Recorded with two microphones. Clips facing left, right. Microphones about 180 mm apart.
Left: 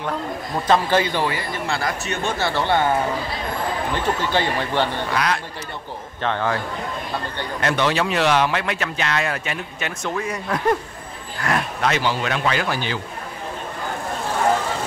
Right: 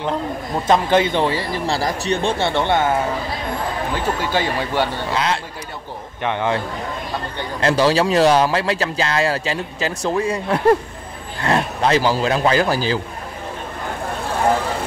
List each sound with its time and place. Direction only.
0.7 s speech: 20° right (ahead or behind)
4.2 s speech: 10° right (ahead or behind)
5.1 s speech: 25° right (ahead or behind)
7.6 s a man's voice: 35° right (ahead or behind)